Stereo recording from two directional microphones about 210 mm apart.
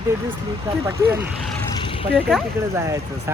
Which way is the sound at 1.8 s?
25° left (ahead or behind).